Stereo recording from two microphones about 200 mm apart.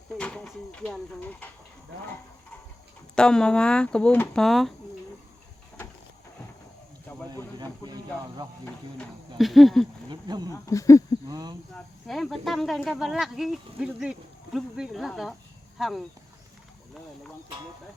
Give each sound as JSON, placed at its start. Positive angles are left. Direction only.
{"t": 0.2, "sound": "speech", "side_deg": 5}
{"t": 3.2, "sound": "speech", "side_deg": 5}
{"t": 8.6, "sound": "speech", "side_deg": 5}
{"t": 10.1, "sound": "speech", "side_deg": -20}
{"t": 10.5, "sound": "speech", "side_deg": 15}
{"t": 11.3, "sound": "speech", "side_deg": -20}
{"t": 12.0, "sound": "speech", "side_deg": 0}